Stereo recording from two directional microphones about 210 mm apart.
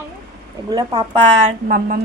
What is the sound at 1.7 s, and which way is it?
Speech, 40° right (ahead or behind).